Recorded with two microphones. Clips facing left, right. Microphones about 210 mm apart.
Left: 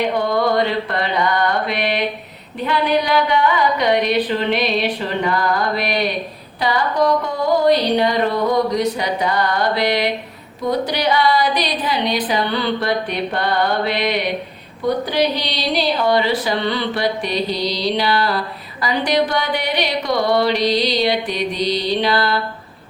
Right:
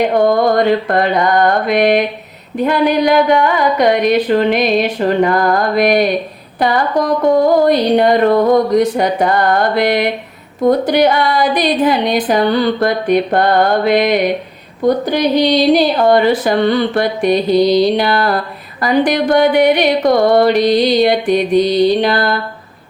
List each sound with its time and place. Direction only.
0.2 s speech: 45° right (ahead or behind)